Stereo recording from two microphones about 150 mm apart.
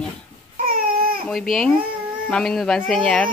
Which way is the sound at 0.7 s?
75° right (ahead or behind).